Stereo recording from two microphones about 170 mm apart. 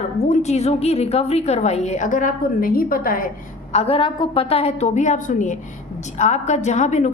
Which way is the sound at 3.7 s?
35° left (ahead or behind).